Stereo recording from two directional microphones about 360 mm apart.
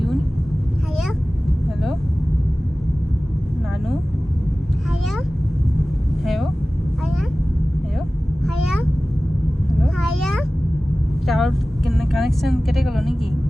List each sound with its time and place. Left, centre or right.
6.2 s vehicle: centre
9.8 s a sound: centre
11.3 s vehicle: centre